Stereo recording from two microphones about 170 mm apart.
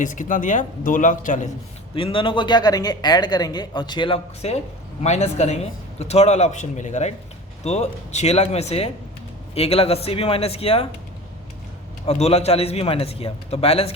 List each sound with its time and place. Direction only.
0.0 s speech: 50° left (ahead or behind)
2.0 s a man's voice: 30° left (ahead or behind)
12.0 s a man's voice: 35° left (ahead or behind)